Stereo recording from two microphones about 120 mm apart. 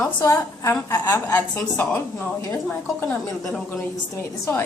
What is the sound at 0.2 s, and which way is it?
A woman's voice, 25° left (ahead or behind).